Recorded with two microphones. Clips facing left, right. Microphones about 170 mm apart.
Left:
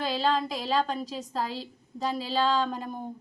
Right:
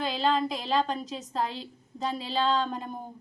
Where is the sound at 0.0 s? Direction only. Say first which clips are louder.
Even; centre (ahead or behind).